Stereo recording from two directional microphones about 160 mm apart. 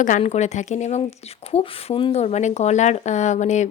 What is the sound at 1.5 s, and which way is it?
A woman's voice, 35° left (ahead or behind).